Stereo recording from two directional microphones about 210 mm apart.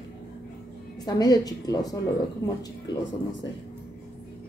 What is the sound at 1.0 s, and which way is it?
Speech, 20° left (ahead or behind).